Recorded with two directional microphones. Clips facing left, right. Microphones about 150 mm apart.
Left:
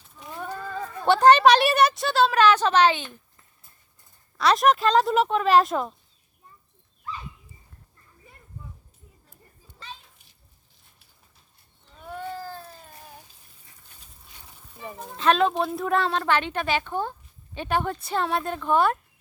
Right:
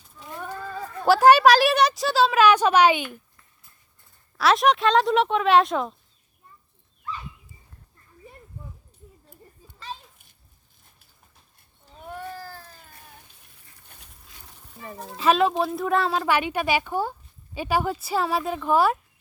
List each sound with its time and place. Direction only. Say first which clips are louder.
1.0 s a woman's voice: right 1 dB; 5° right (ahead or behind)
4.4 s speech: even; centre (ahead or behind)
12.4 s baby cry: left 4 dB; 20° left (ahead or behind)
14.8 s speech: even; 5° left (ahead or behind)